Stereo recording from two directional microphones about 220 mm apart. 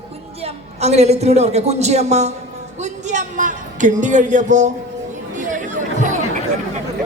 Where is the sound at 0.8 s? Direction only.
30° right (ahead or behind).